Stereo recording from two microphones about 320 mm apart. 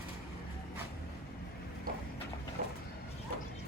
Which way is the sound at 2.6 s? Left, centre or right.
Right.